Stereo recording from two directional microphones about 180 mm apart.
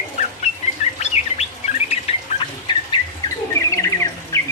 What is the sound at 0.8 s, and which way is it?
Bird, 35° left (ahead or behind).